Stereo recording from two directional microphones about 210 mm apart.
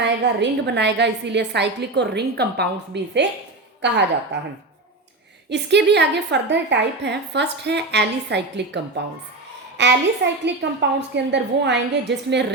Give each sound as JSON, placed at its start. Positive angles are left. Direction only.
{"t": 0.0, "sound": "a woman's voice", "side_deg": -55}
{"t": 5.5, "sound": "a woman's voice", "side_deg": -55}
{"t": 9.8, "sound": "a woman's voice", "side_deg": -55}